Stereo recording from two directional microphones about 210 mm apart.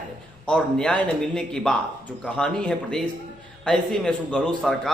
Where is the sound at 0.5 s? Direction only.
5° left (ahead or behind).